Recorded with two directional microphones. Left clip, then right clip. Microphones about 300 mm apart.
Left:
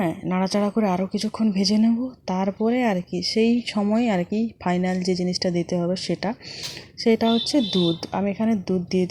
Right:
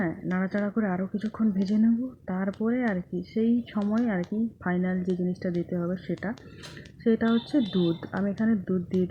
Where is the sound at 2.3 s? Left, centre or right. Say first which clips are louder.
Left 7 dB; centre.